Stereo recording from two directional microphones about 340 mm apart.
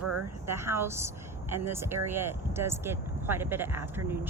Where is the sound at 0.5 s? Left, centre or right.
Centre.